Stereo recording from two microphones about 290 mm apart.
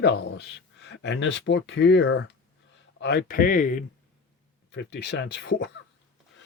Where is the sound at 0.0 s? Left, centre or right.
Left.